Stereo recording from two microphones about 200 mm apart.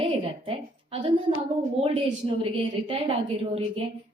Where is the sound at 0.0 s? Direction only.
30° right (ahead or behind).